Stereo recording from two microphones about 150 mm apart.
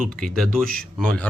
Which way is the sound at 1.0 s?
5° left (ahead or behind).